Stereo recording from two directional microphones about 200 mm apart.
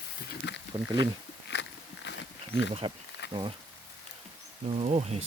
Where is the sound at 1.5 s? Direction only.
60° left (ahead or behind).